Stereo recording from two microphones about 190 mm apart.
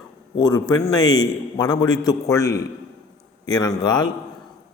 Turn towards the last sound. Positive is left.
turn(degrees=20)  # may be behind; listen again after turning